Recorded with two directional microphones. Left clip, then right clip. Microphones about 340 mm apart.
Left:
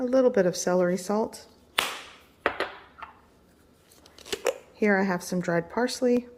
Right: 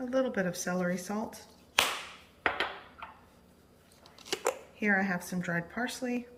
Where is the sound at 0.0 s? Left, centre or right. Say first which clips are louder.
Left 9 dB; centre.